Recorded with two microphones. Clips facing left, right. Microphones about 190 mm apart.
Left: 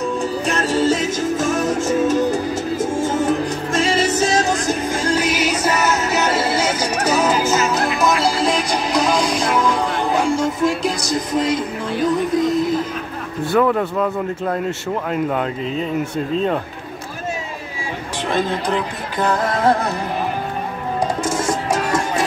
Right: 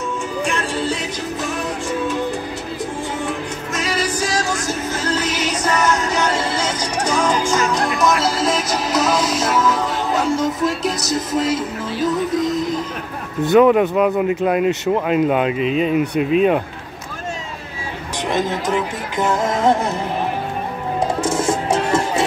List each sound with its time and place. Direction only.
0.5 s music: 40° left (ahead or behind)
3.7 s music: 25° left (ahead or behind); by 12.6 s centre (ahead or behind)
13.5 s speech: 20° right (ahead or behind)
18.3 s speech: 15° right (ahead or behind)